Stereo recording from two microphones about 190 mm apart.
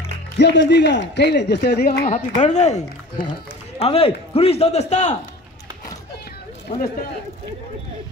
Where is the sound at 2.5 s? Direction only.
35° left (ahead or behind).